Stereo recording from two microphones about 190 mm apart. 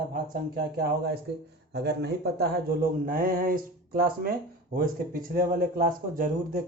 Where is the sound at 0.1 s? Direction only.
55° right (ahead or behind).